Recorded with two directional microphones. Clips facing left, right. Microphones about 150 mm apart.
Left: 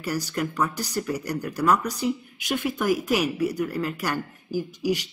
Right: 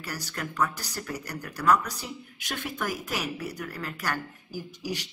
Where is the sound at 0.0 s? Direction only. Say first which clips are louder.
Left 9 dB; 20° left (ahead or behind).